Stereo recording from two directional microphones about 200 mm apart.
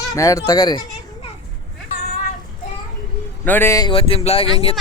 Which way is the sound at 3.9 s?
30° left (ahead or behind).